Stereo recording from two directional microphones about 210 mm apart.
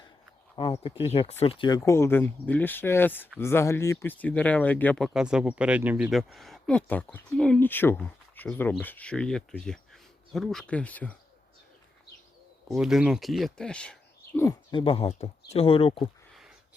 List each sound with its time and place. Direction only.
0.5 s speech: 25° left (ahead or behind); by 11.2 s 5° left (ahead or behind)
12.6 s speech: centre (ahead or behind)
14.4 s speech: 25° left (ahead or behind)